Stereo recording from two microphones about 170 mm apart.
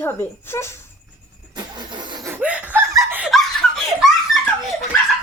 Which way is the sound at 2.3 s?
5° right (ahead or behind).